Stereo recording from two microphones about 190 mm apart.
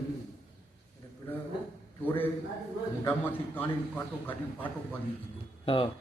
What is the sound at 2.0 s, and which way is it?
A man's voice, 10° left (ahead or behind).